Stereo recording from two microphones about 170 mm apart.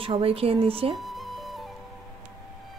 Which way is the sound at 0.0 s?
35° right (ahead or behind).